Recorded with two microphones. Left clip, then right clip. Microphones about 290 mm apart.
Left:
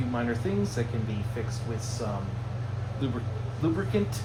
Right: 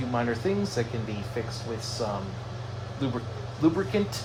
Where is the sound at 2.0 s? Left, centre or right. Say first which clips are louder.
Right 4 dB; right.